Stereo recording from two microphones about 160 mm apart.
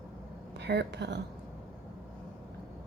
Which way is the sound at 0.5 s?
90° right.